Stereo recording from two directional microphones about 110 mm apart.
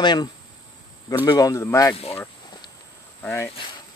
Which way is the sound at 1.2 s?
35° left (ahead or behind).